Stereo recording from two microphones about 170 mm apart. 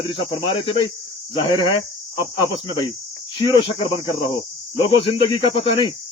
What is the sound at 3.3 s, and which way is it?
Speech, 30° left (ahead or behind).